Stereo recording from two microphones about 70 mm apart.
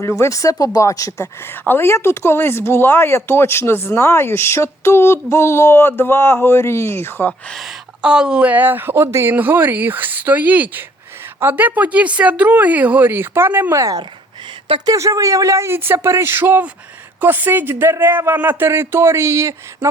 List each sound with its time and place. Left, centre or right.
0.0 s speech: left
1.6 s speech: left
8.0 s speech: centre; by 9.3 s right
9.3 s speech: right
13.7 s speech: right